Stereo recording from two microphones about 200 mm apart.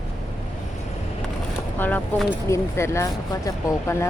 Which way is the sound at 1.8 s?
10° left (ahead or behind).